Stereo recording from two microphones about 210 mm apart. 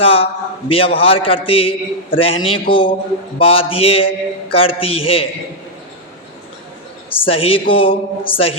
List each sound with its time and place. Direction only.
0.0 s a man's voice: 25° left (ahead or behind)
7.1 s a man's voice: 25° left (ahead or behind)